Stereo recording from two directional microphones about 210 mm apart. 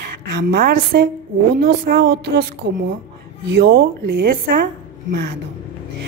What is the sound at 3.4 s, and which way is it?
A woman's voice, 55° right (ahead or behind).